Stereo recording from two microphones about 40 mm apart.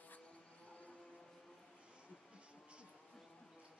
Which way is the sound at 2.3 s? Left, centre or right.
Right.